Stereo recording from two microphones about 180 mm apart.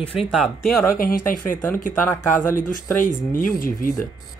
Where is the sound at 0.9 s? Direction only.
50° left (ahead or behind).